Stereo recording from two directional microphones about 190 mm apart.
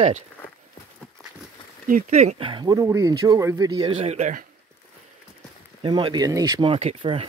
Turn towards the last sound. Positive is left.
turn(degrees=-30)  # may be behind; listen again after turning